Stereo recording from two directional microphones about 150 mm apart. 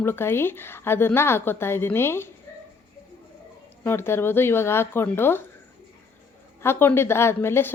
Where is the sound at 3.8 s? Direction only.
15° left (ahead or behind).